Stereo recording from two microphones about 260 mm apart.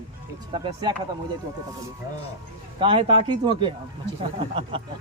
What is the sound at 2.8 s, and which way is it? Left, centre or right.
Speech, centre.